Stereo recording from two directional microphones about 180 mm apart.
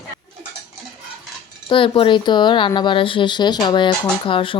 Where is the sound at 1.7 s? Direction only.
30° left (ahead or behind).